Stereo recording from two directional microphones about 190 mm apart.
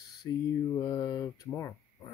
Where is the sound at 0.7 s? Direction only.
20° left (ahead or behind).